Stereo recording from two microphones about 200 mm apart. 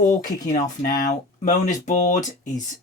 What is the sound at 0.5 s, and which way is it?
Speech, 45° left (ahead or behind).